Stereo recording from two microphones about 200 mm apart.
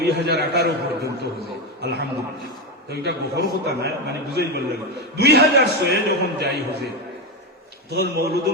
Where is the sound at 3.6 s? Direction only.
55° right (ahead or behind).